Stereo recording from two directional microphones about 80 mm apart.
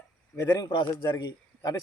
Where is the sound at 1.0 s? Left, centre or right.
Left.